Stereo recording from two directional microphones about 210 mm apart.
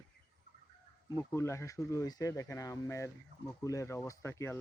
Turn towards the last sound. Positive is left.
turn(degrees=10)  # may be behind; listen again after turning